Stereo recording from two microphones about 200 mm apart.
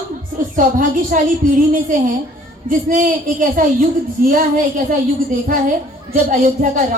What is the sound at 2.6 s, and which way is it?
A woman's voice, 45° right (ahead or behind).